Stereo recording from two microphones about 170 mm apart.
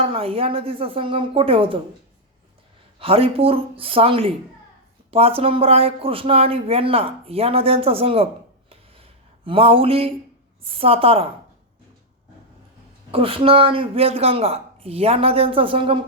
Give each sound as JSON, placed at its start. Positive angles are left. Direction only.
{"t": 0.0, "sound": "speech", "side_deg": -35}
{"t": 3.0, "sound": "speech", "side_deg": -35}
{"t": 8.7, "sound": "a sound", "side_deg": -35}
{"t": 10.7, "sound": "speech", "side_deg": -35}
{"t": 13.1, "sound": "speech", "side_deg": -30}